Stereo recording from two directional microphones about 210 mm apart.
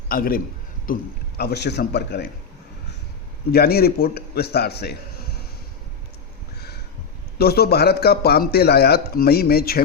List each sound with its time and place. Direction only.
0.1 s a man's voice: 45° left (ahead or behind)
3.5 s a man's voice: 45° left (ahead or behind)
6.6 s a sound: 50° left (ahead or behind)
7.3 s a man's voice: 50° left (ahead or behind)